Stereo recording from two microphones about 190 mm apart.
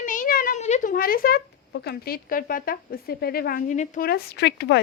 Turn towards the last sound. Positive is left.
turn(degrees=65)  # may be behind; listen again after turning